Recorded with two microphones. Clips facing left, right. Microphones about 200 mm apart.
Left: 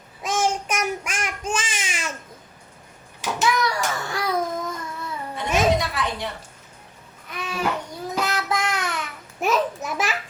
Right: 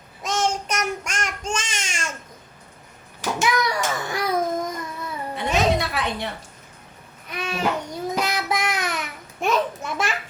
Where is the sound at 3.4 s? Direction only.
20° right (ahead or behind).